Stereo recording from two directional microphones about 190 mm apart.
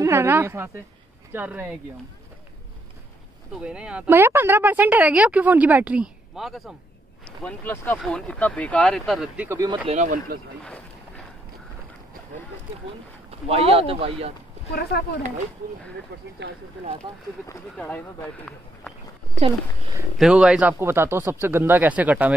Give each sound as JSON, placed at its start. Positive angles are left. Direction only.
{"t": 0.0, "sound": "speech", "side_deg": -15}
{"t": 3.6, "sound": "speech", "side_deg": -5}
{"t": 9.8, "sound": "speech", "side_deg": -40}
{"t": 13.5, "sound": "speech", "side_deg": -30}
{"t": 14.7, "sound": "speech", "side_deg": 60}
{"t": 16.1, "sound": "speech", "side_deg": -60}
{"t": 17.5, "sound": "speech", "side_deg": 10}
{"t": 20.2, "sound": "speech", "side_deg": -5}